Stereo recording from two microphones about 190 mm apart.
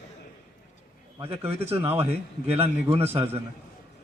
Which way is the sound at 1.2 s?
10° right (ahead or behind).